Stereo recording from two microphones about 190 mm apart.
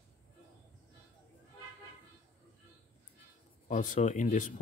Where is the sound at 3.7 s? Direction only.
40° left (ahead or behind).